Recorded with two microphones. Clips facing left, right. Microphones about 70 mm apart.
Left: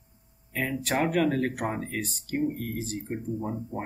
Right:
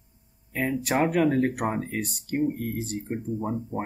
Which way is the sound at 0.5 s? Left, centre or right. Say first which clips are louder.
Right 3 dB; centre.